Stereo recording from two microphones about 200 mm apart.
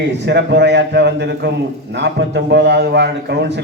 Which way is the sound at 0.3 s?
60° right (ahead or behind).